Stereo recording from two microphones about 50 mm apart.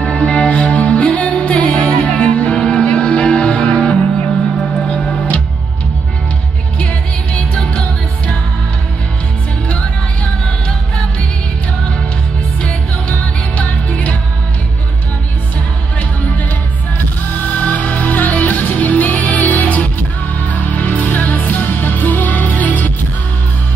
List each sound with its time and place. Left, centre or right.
0.0 s music: left
13.6 s music: left
17.6 s music: left